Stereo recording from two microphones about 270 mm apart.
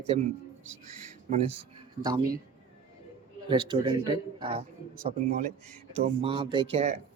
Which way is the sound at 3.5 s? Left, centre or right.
Centre.